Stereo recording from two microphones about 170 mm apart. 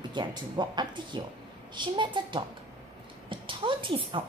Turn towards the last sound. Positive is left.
turn(degrees=-30)  # may be behind; listen again after turning